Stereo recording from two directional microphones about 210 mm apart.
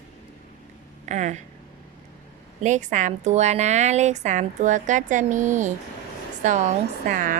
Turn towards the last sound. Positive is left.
turn(degrees=-40)  # may be behind; listen again after turning